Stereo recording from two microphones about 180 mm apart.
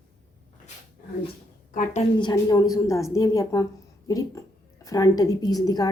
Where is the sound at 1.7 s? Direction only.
40° left (ahead or behind).